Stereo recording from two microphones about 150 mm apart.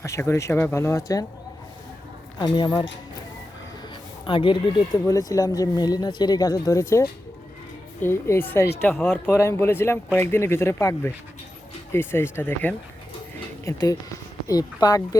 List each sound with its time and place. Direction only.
0.0 s speech: 20° left (ahead or behind)
2.4 s speech: 30° left (ahead or behind)
4.3 s speech: 35° left (ahead or behind)
5.0 s speech: 25° left (ahead or behind)
13.7 s speech: 25° left (ahead or behind)